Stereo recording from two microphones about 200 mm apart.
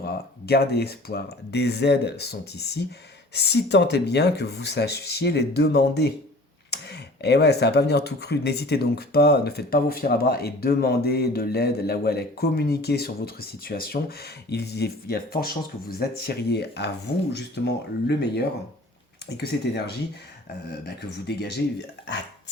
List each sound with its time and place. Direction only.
0.0 s speech: 50° left (ahead or behind)